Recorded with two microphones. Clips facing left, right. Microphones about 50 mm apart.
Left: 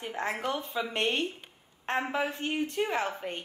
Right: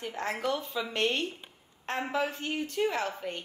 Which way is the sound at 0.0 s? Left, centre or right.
Left.